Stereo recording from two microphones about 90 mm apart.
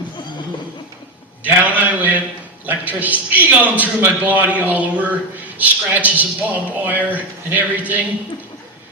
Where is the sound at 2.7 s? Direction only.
20° right (ahead or behind).